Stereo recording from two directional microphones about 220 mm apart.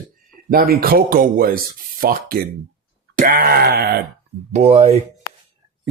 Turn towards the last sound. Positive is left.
turn(degrees=-30)  # may be behind; listen again after turning